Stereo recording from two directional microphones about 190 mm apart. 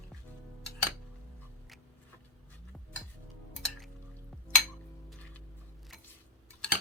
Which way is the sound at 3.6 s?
5° left (ahead or behind).